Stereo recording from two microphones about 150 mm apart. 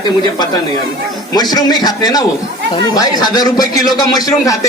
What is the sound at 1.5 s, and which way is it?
A man's voice, 25° left (ahead or behind).